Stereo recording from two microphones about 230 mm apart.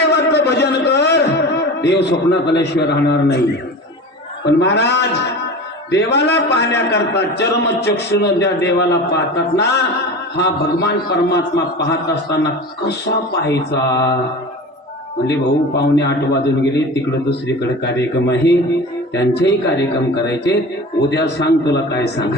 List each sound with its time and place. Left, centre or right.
0.0 s a sound: left
1.8 s a man's voice: left
4.4 s a man's voice: left
15.3 s a man's voice: left